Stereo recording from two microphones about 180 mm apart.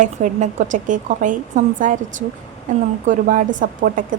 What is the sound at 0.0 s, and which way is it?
A woman's voice, 45° right (ahead or behind).